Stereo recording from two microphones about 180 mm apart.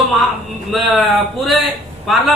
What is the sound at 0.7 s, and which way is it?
A man's voice, centre (ahead or behind).